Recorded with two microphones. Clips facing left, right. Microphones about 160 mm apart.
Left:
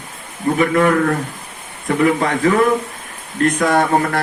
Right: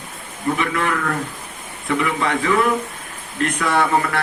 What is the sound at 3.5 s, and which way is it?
Speech, 40° left (ahead or behind).